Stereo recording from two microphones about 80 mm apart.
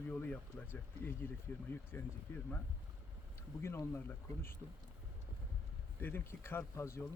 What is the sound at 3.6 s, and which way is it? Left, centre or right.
Speech, left.